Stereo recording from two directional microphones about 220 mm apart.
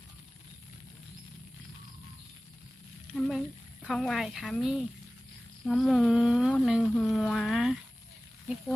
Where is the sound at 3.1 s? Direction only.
Centre (ahead or behind).